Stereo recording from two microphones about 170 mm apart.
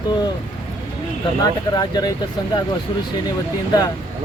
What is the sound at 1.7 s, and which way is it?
Speech, 25° left (ahead or behind).